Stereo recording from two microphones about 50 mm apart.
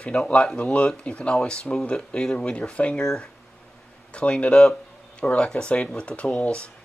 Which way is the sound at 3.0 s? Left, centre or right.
Centre.